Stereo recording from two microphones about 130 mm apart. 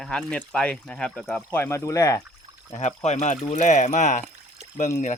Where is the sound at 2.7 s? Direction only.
60° left (ahead or behind).